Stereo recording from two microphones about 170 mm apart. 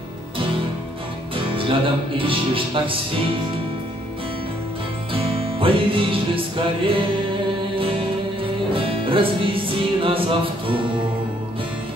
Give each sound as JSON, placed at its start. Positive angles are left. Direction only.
{"t": 1.3, "sound": "speech", "side_deg": -30}
{"t": 5.1, "sound": "music", "side_deg": -30}
{"t": 8.7, "sound": "music", "side_deg": -30}